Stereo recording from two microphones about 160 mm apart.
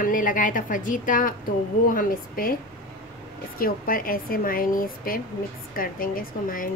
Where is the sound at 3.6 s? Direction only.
65° left (ahead or behind).